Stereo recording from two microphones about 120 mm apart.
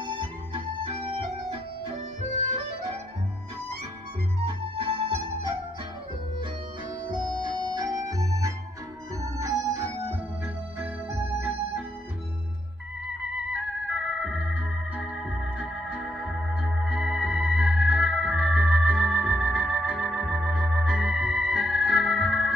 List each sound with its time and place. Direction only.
0.0 s music: 45° right (ahead or behind)
4.7 s music: 50° right (ahead or behind)
7.5 s organ: 35° right (ahead or behind); by 11.8 s 20° right (ahead or behind)
13.5 s organ: 5° right (ahead or behind)